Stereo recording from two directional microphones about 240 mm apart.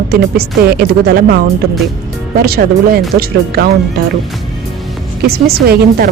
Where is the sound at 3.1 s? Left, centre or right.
Right.